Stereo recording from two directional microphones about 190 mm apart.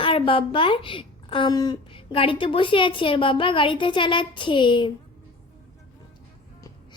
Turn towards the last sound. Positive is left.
turn(degrees=20)  # may be behind; listen again after turning